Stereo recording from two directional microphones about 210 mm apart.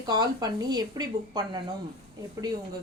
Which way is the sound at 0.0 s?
20° right (ahead or behind).